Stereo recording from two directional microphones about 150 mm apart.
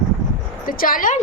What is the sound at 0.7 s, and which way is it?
Speech, 65° left (ahead or behind).